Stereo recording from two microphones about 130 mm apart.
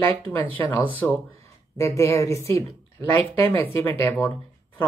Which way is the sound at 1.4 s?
25° left (ahead or behind).